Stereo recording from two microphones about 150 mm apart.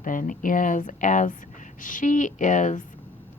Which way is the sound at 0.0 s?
65° left (ahead or behind).